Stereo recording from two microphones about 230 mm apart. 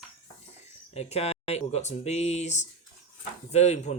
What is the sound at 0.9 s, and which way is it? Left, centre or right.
Speech, left.